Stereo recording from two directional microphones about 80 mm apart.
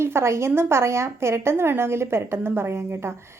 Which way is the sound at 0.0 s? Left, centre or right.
Right.